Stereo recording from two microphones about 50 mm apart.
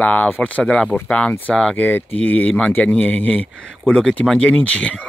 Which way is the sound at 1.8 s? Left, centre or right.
Left.